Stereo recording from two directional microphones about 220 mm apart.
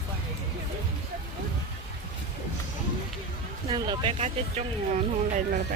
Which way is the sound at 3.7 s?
20° right (ahead or behind).